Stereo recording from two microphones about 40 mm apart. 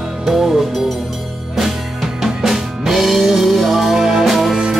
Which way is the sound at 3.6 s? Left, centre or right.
Centre.